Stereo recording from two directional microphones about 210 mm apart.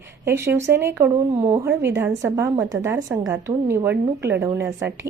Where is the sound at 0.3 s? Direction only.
10° right (ahead or behind).